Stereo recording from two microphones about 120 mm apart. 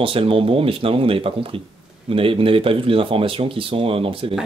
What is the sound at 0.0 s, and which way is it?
Speech, 50° right (ahead or behind).